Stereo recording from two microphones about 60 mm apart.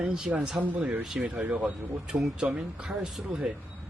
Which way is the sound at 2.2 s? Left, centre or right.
Centre.